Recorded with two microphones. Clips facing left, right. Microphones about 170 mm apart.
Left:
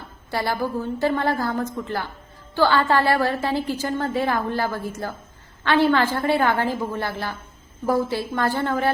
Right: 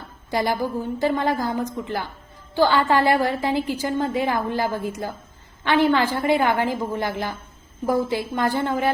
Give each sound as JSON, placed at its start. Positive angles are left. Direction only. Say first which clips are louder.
{"t": 0.3, "sound": "a woman's voice", "louder": "right 2 dB", "side_deg": -15}